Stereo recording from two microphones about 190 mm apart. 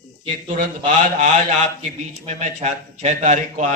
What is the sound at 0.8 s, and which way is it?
A man's voice, 40° right (ahead or behind).